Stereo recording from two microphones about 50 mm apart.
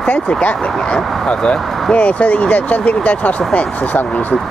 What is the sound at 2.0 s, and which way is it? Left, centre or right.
Speech, left.